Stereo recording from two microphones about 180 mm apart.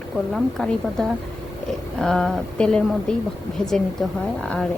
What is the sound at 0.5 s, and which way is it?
Speech, centre (ahead or behind).